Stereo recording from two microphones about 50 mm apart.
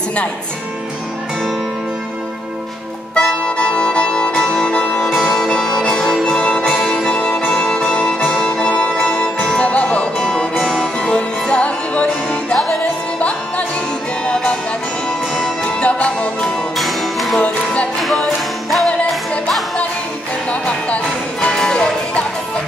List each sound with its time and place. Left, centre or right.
3.2 s music: centre
10.2 s music: centre
11.0 s music: centre
14.2 s music: centre
15.6 s music: left
16.7 s music: centre
20.6 s music: left